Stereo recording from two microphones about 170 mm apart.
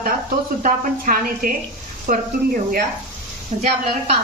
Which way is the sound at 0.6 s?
55° right (ahead or behind).